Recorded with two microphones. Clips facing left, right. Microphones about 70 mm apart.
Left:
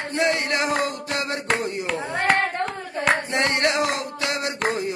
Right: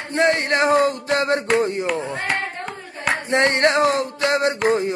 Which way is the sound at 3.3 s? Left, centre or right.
Right.